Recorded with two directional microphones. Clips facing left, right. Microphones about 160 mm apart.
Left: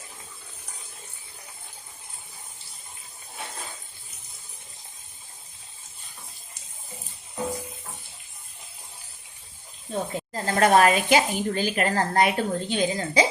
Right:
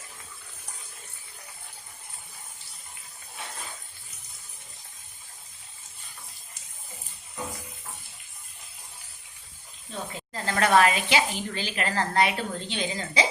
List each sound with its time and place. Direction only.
9.9 s speech: 40° left (ahead or behind)